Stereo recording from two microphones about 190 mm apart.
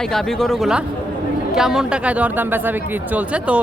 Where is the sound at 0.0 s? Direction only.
Centre (ahead or behind).